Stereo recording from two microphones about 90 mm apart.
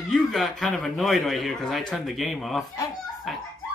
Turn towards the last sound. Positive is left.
turn(degrees=0)  # may be behind; listen again after turning